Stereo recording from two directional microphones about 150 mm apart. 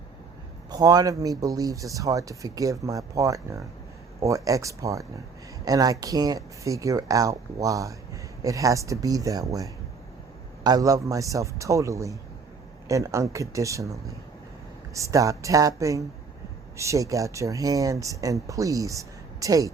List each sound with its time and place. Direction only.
0.7 s a man's voice: 25° right (ahead or behind)